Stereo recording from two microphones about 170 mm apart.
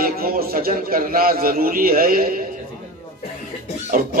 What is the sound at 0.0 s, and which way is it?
A man's voice, 60° right (ahead or behind).